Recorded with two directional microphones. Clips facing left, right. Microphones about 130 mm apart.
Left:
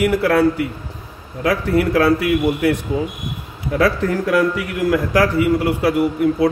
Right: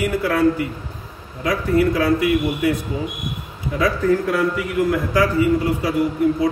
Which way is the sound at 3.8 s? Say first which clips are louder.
Even; 90° left.